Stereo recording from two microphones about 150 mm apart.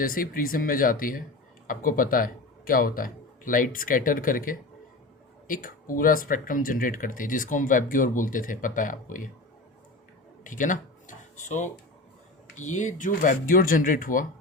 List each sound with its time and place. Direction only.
0.0 s speech: 70° left (ahead or behind)
10.4 s speech: 60° left (ahead or behind)